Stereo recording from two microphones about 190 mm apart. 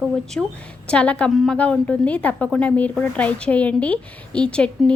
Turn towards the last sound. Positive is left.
turn(degrees=5)  # may be behind; listen again after turning